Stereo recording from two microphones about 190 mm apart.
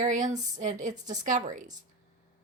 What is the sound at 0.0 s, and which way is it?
Speech, 40° right (ahead or behind).